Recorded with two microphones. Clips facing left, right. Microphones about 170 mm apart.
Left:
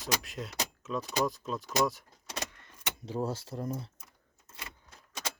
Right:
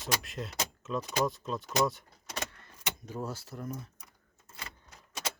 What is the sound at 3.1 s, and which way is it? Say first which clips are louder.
Speech: left 6 dB; 30° left (ahead or behind).